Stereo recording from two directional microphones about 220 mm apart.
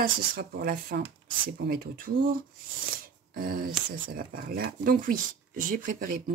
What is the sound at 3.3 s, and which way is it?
Speech, 40° right (ahead or behind).